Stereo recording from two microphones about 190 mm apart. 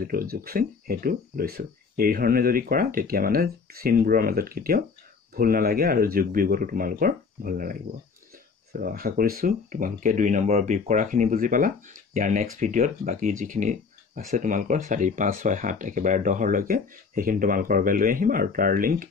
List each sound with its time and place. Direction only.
0.0 s speech: 50° right (ahead or behind)
8.7 s speech: 50° right (ahead or behind)